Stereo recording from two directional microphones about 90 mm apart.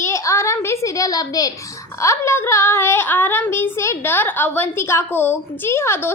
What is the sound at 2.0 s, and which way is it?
A woman's voice, 35° left (ahead or behind).